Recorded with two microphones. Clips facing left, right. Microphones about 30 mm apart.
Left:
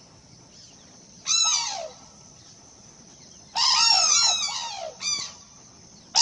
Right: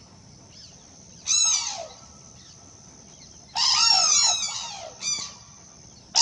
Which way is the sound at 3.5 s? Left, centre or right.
Centre.